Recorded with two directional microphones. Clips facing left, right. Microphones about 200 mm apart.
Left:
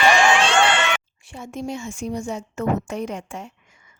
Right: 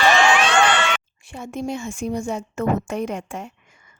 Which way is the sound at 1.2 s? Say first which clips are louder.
Right 2 dB; 55° right (ahead or behind).